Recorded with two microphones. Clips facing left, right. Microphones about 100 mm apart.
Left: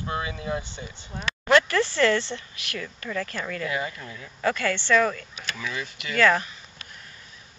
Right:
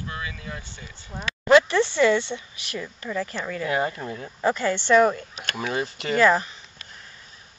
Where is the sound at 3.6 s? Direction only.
40° right (ahead or behind).